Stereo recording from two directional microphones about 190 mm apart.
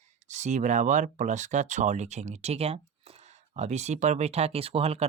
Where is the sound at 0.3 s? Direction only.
40° right (ahead or behind).